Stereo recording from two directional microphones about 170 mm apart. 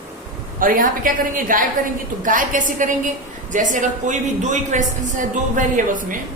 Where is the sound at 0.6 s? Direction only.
55° right (ahead or behind).